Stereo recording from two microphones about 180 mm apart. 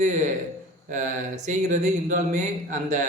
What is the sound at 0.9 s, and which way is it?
Speech, 45° right (ahead or behind).